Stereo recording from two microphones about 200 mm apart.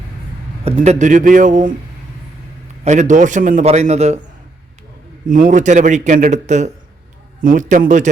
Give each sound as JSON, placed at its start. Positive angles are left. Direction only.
{"t": 0.6, "sound": "a man's voice", "side_deg": -35}
{"t": 2.8, "sound": "a man's voice", "side_deg": -35}
{"t": 5.3, "sound": "a man's voice", "side_deg": -40}